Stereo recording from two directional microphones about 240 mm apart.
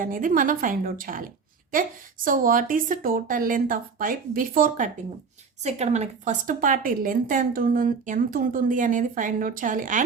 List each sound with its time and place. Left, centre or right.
0.0 s a woman's voice: right
2.2 s a woman's voice: right